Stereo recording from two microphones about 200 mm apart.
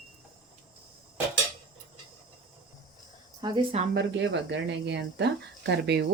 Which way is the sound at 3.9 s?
60° right (ahead or behind).